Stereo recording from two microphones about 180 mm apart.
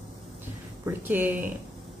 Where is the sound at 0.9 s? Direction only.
10° right (ahead or behind).